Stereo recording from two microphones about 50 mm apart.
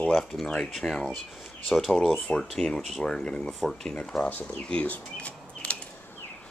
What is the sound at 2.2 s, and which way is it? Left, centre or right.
Speech, centre.